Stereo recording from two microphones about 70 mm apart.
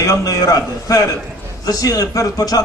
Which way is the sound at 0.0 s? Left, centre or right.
Left.